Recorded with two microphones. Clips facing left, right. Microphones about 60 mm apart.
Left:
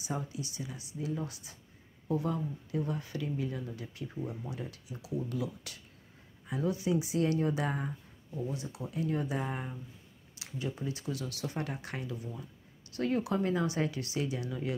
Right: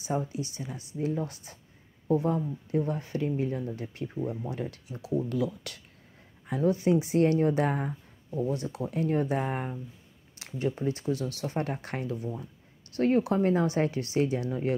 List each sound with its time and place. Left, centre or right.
0.0 s speech: right
5.3 s speech: right